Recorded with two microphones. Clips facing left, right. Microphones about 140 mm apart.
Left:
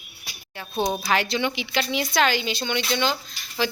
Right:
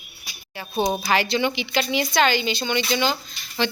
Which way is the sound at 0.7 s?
5° right (ahead or behind).